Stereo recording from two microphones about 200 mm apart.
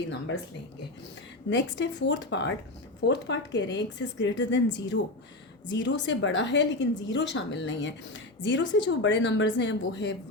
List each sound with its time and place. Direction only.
1.5 s a woman's voice: 65° left (ahead or behind)